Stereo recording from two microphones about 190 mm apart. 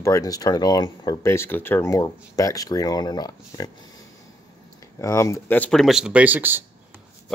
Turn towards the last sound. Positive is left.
turn(degrees=-10)  # may be behind; listen again after turning